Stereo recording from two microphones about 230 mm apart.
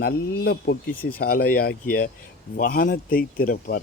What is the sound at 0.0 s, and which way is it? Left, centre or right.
Speech, left.